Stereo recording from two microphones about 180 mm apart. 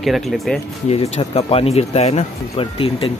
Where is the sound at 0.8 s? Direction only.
35° left (ahead or behind).